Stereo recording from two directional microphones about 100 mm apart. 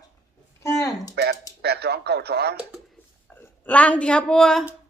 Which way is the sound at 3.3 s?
15° left (ahead or behind).